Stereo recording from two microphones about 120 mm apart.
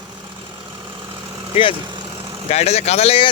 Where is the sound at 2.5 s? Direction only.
65° left (ahead or behind).